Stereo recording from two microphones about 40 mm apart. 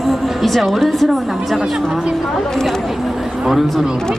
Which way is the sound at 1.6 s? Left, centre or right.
Centre.